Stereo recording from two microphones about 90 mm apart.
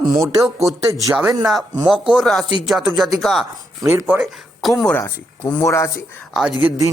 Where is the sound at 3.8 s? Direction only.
40° right (ahead or behind).